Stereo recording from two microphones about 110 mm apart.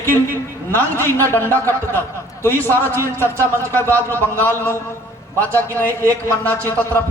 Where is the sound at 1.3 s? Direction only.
20° left (ahead or behind).